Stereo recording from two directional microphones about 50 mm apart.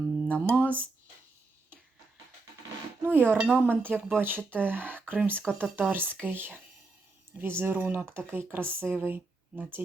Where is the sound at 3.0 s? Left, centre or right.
Right.